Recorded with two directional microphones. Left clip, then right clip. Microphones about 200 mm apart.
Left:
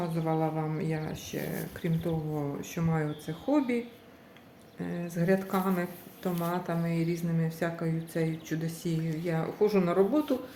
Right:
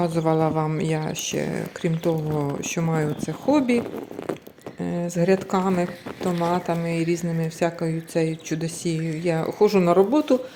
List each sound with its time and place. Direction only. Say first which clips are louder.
0.0 s speech: right 9 dB; 50° right (ahead or behind)
4.8 s speech: right 10 dB; 45° right (ahead or behind)